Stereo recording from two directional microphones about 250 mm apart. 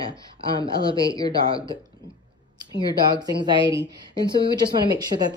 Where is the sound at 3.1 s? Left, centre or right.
Centre.